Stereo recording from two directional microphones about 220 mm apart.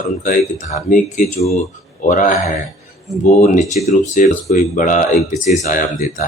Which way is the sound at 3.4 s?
35° left (ahead or behind).